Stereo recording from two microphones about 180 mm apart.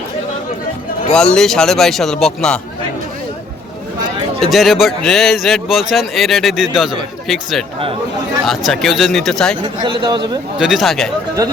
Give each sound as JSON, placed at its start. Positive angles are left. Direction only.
{"t": 1.1, "sound": "speech", "side_deg": 5}
{"t": 4.4, "sound": "speech", "side_deg": 0}
{"t": 9.6, "sound": "a man's voice", "side_deg": -25}
{"t": 10.6, "sound": "speech", "side_deg": 0}